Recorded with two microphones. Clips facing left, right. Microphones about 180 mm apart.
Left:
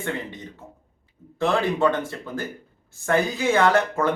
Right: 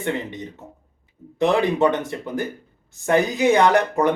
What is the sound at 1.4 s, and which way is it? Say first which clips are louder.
A man's voice: right 3 dB; 20° right (ahead or behind).